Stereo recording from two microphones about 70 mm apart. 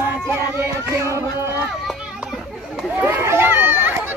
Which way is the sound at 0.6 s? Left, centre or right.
Right.